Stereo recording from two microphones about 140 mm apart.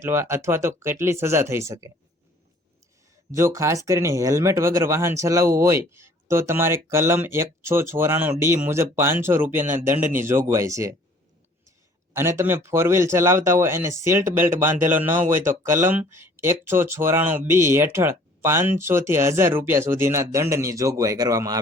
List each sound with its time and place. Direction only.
0.0 s speech: 20° right (ahead or behind)
3.3 s speech: 20° right (ahead or behind)
12.1 s speech: 20° right (ahead or behind)